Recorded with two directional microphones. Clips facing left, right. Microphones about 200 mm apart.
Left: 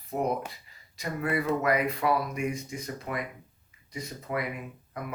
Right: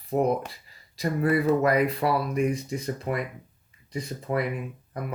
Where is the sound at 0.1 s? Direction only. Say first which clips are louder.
Right 5 dB; 35° right (ahead or behind).